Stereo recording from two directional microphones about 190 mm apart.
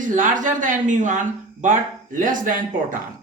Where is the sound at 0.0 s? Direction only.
40° right (ahead or behind).